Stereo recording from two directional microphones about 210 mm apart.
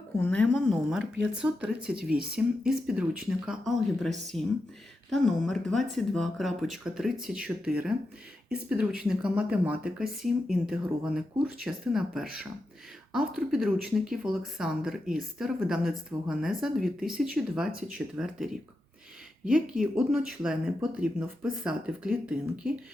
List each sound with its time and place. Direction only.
0.2 s speech: 5° left (ahead or behind)
19.5 s speech: 5° right (ahead or behind)